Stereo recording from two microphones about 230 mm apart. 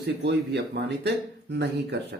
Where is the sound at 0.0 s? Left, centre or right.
Right.